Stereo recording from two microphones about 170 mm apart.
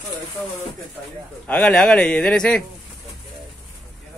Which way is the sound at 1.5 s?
5° left (ahead or behind).